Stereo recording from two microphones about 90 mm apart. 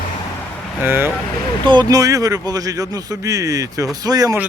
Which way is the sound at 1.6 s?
60° right (ahead or behind).